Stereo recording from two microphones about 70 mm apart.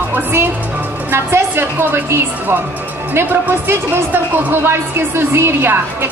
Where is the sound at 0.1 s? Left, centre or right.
Right.